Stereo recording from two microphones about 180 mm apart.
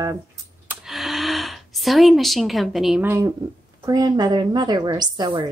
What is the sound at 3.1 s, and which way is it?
A woman's voice, 15° right (ahead or behind).